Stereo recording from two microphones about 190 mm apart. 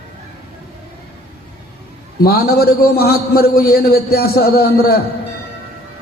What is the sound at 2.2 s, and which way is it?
A man's voice, 55° left (ahead or behind).